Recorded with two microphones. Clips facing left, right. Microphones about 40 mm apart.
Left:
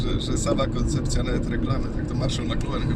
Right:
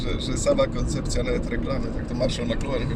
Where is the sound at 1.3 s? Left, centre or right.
Centre.